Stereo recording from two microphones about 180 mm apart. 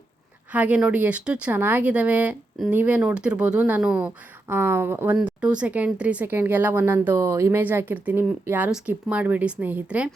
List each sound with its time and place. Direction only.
0.5 s speech: 10° right (ahead or behind)